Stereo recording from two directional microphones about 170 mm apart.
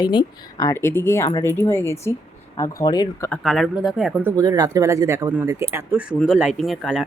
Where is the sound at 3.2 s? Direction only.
Centre (ahead or behind).